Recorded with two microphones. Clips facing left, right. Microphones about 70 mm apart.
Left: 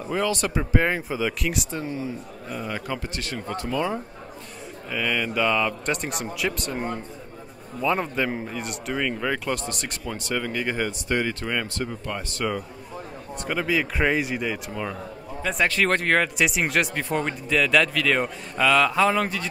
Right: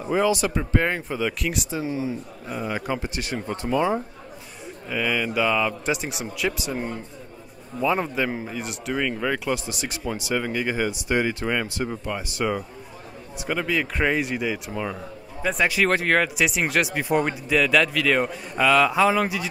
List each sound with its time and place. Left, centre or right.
0.0 s speech: centre
0.6 s speech: centre
4.8 s speech: centre
13.4 s speech: centre